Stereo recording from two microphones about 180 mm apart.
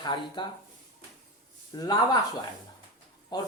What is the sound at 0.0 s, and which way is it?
Speech, 25° left (ahead or behind).